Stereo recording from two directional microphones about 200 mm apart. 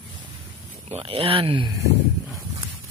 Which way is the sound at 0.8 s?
30° right (ahead or behind).